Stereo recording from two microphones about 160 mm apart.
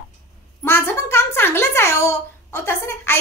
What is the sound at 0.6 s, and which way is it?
A woman's voice, 15° left (ahead or behind).